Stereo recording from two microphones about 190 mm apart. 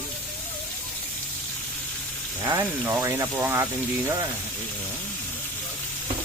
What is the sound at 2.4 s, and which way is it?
Speech, 15° right (ahead or behind).